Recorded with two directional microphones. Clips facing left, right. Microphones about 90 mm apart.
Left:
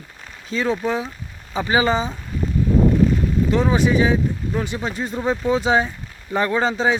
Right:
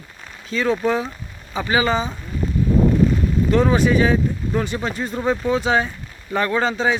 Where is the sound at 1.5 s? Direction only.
25° left (ahead or behind).